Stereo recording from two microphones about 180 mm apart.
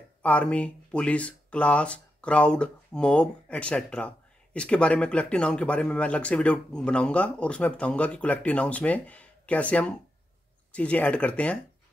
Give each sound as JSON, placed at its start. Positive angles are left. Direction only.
{"t": 0.2, "sound": "speech", "side_deg": 5}